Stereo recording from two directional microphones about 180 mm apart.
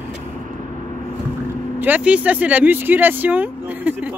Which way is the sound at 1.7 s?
10° right (ahead or behind).